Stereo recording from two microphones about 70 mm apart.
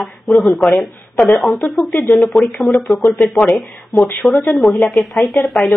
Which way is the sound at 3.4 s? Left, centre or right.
Left.